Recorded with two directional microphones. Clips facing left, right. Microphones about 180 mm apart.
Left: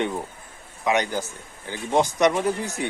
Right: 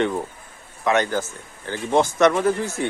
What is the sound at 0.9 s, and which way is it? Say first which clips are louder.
Speech: right 3 dB; 15° left (ahead or behind).